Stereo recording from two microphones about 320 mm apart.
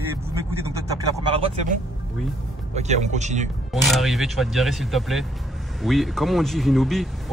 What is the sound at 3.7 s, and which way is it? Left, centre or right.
Speech, centre.